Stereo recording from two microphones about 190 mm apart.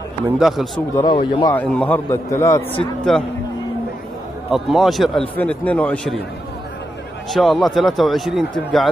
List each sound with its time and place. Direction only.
0.4 s a man's voice: centre (ahead or behind)
0.9 s a man's voice: 25° left (ahead or behind)
1.5 s a man's voice: 5° left (ahead or behind)
4.5 s a man's voice: centre (ahead or behind)
7.2 s a man's voice: centre (ahead or behind)